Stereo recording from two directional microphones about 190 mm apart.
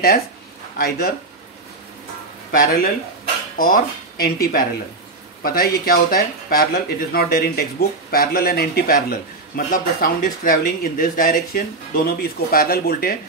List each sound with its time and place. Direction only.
0.7 s speech: 50° left (ahead or behind)
2.6 s speech: 50° left (ahead or behind)